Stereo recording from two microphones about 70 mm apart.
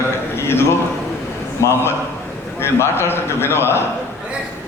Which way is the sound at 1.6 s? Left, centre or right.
Left.